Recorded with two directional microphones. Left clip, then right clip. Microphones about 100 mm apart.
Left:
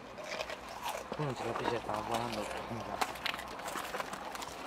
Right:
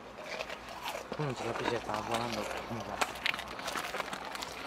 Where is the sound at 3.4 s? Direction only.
25° right (ahead or behind).